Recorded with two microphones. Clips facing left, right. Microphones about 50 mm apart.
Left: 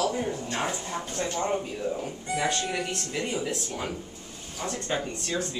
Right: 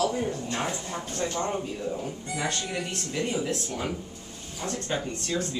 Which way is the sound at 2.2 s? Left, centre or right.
Left.